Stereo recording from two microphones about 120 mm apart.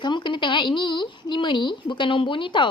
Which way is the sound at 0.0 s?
40° left (ahead or behind).